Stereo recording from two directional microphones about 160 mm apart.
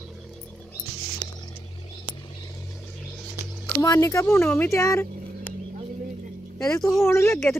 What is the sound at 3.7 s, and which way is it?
Speech, 20° left (ahead or behind).